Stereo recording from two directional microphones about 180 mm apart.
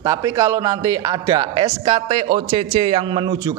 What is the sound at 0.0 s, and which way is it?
A man's voice, 15° right (ahead or behind).